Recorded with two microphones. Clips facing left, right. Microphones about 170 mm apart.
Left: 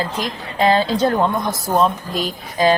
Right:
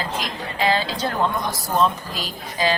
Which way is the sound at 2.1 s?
50° left (ahead or behind).